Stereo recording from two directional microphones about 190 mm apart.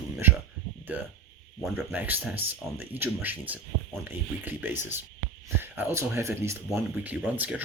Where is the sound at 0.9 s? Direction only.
10° right (ahead or behind).